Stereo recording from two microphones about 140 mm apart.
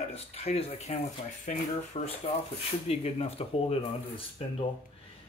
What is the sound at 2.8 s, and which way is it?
Speech, 45° left (ahead or behind).